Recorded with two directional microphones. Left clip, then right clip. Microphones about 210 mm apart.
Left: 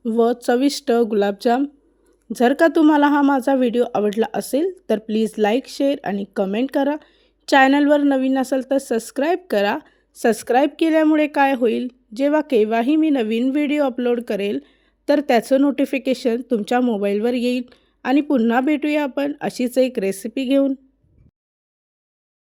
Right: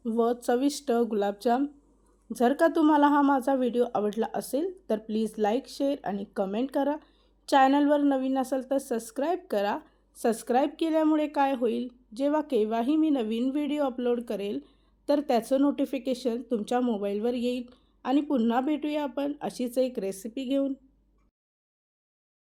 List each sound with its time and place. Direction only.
0.0 s speech: 35° left (ahead or behind)